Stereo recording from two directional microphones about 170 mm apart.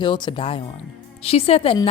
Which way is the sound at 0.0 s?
30° left (ahead or behind).